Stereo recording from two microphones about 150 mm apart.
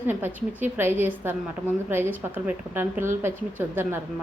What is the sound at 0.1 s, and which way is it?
A woman's voice, 15° right (ahead or behind).